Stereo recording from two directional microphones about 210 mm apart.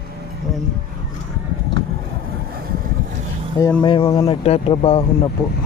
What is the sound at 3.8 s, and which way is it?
Speech, 25° left (ahead or behind).